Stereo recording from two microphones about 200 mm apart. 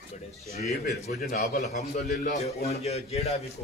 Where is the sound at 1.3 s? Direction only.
35° left (ahead or behind).